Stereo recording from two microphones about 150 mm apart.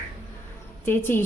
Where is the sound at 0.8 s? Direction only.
15° left (ahead or behind).